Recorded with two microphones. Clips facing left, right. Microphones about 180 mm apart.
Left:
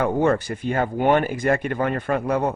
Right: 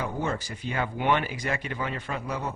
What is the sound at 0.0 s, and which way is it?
Speech, 60° left (ahead or behind).